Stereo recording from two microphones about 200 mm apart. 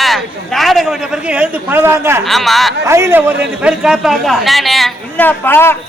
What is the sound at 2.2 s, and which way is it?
Speech, centre (ahead or behind).